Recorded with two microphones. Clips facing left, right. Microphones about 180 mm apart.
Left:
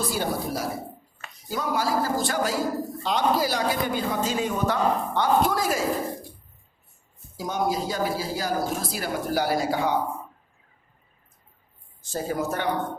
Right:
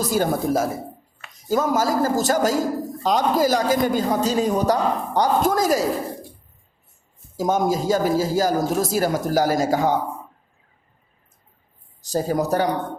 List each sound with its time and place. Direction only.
0.0 s a man's voice: 45° right (ahead or behind)
7.3 s a man's voice: 45° right (ahead or behind)
12.0 s speech: 40° right (ahead or behind)